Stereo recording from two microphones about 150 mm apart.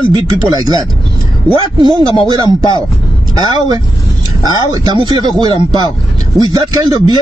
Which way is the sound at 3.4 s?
30° right (ahead or behind).